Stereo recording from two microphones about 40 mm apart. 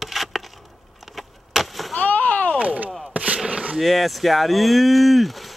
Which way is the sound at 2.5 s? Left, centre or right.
Right.